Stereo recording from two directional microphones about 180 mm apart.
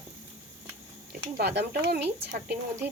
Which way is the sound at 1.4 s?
60° right (ahead or behind).